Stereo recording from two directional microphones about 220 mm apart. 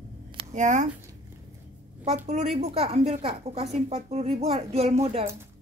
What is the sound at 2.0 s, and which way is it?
A woman's voice, 30° right (ahead or behind).